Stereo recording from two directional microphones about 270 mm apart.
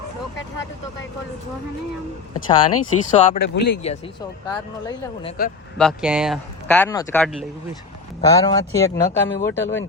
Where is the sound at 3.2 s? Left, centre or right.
Left.